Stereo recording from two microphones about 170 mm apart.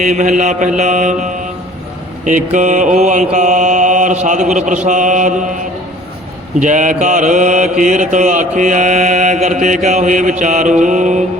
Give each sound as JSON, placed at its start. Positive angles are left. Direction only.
{"t": 0.0, "sound": "mantra", "side_deg": -45}
{"t": 6.6, "sound": "mantra", "side_deg": -50}